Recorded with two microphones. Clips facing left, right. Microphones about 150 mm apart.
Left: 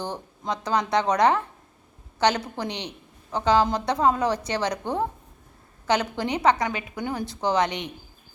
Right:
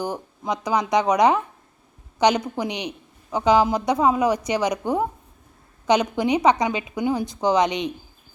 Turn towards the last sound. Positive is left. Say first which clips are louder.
# right 4 dB
turn(degrees=-15)  # may be behind; listen again after turning